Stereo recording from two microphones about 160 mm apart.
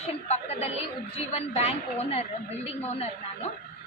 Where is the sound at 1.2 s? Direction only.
40° left (ahead or behind).